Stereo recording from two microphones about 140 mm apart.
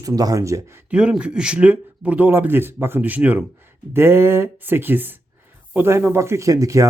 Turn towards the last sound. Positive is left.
turn(degrees=-25)  # may be behind; listen again after turning